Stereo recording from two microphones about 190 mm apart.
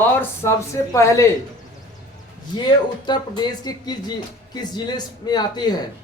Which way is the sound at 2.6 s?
25° left (ahead or behind).